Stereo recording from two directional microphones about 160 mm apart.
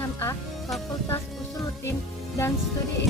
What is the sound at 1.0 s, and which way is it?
Music, 20° left (ahead or behind).